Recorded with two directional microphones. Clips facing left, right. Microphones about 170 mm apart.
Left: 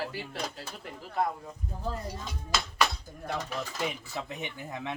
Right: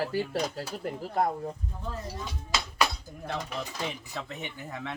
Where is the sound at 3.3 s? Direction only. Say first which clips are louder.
Left 1 dB; 5° right (ahead or behind); by 5.0 s 15° left (ahead or behind).